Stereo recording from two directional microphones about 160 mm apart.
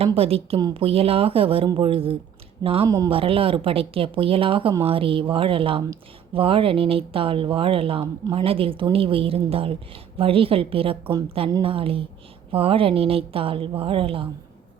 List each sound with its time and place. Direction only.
0.0 s speech: 35° right (ahead or behind)
2.9 s speech: 25° right (ahead or behind)
3.2 s speech: 35° right (ahead or behind)